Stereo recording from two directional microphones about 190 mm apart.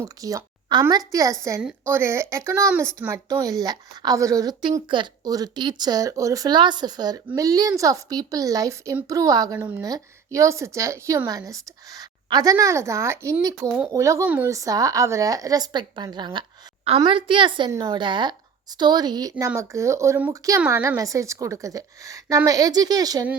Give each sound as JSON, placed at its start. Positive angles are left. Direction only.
{"t": 0.0, "sound": "a woman's voice", "side_deg": -15}